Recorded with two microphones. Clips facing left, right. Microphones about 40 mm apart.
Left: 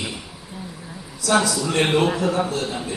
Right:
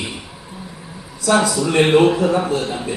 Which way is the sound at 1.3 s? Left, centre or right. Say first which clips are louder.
Right 4 dB; centre.